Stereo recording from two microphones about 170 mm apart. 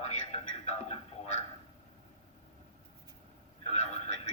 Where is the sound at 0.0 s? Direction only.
40° left (ahead or behind).